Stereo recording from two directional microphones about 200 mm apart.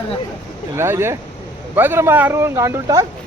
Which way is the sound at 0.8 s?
15° right (ahead or behind).